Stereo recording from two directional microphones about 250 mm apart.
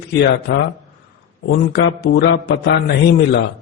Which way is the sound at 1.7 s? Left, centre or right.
Left.